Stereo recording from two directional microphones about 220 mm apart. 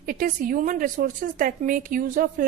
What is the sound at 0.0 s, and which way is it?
A woman's voice, 40° right (ahead or behind).